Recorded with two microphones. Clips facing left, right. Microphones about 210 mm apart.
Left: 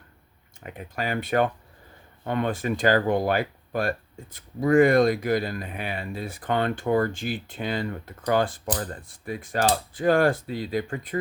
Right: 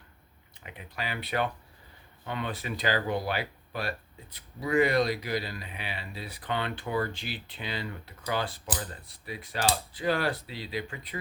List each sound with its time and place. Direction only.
0.6 s speech: 45° left (ahead or behind)